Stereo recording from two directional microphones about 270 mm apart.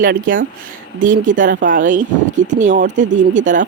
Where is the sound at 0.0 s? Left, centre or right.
Right.